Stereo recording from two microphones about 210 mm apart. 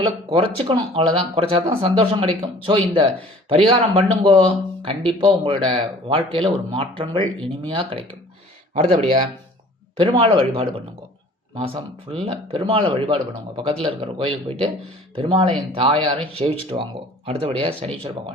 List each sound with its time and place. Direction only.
0.3 s speech: 25° right (ahead or behind)